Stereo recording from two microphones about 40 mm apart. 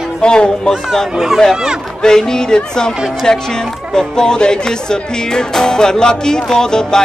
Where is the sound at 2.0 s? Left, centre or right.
Centre.